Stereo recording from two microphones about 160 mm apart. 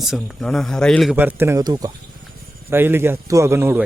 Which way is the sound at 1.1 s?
15° right (ahead or behind).